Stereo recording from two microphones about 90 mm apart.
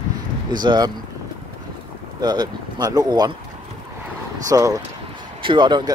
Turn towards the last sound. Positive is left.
turn(degrees=-55)  # may be behind; listen again after turning